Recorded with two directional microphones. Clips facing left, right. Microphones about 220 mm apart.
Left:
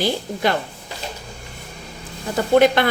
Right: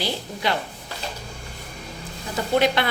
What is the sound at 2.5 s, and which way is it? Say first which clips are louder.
Speech: left 6 dB; 50° left (ahead or behind).